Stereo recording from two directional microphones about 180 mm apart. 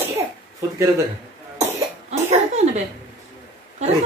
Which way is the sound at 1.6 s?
40° right (ahead or behind).